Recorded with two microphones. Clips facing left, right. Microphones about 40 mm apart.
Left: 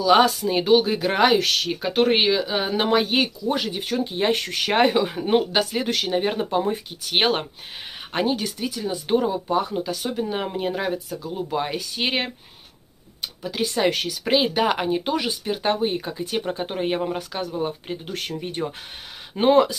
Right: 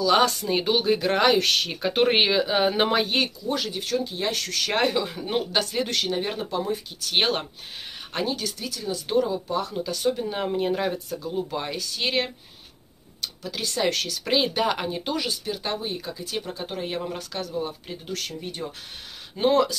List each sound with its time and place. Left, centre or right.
0.0 s speech: centre
3.4 s speech: centre
11.5 s speech: centre